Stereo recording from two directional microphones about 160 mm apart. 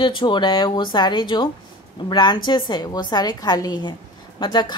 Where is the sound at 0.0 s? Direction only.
30° left (ahead or behind).